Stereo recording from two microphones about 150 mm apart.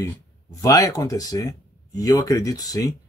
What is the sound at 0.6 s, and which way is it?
Speech, 25° left (ahead or behind).